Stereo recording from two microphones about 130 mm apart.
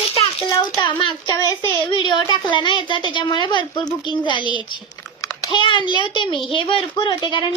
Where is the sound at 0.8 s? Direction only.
35° left (ahead or behind).